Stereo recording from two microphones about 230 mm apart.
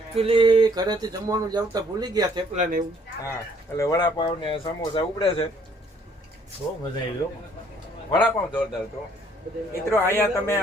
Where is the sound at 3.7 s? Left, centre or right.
Centre.